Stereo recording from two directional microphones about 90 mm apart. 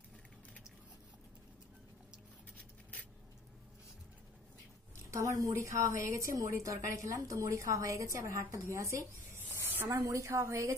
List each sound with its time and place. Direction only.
2.5 s writing: 15° left (ahead or behind)
5.1 s a woman's voice: 35° right (ahead or behind)